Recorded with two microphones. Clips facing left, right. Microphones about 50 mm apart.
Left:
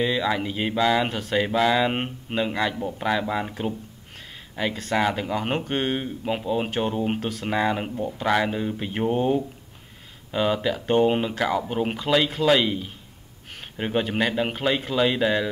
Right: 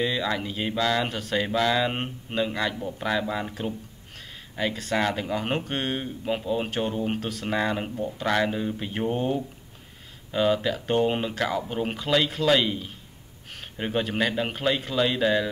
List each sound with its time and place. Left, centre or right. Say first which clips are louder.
0.0 s speech: left 3 dB; centre
4.6 s speech: left 2 dB; centre